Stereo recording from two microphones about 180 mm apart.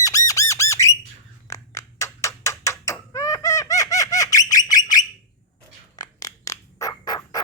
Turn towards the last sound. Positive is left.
turn(degrees=20)  # may be behind; listen again after turning